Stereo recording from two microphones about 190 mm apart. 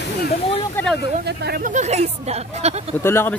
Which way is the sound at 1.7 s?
35° right (ahead or behind).